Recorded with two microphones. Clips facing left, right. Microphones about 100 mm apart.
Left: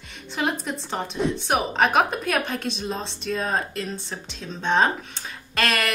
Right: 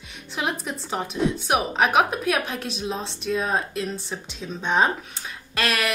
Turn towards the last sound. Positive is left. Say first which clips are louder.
# left 1 dB
turn(degrees=0)  # may be behind; listen again after turning